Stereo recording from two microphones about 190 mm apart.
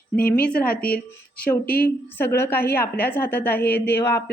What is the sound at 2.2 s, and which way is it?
Speech, 10° left (ahead or behind).